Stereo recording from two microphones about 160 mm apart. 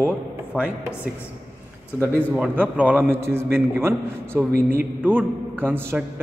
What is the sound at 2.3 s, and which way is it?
A man's voice, 10° right (ahead or behind).